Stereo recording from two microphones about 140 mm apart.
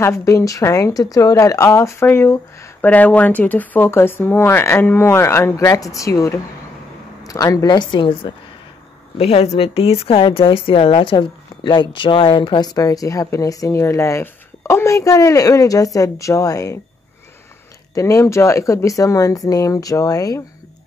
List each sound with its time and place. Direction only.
0.0 s a woman's voice: 20° left (ahead or behind)
17.9 s a woman's voice: 20° left (ahead or behind)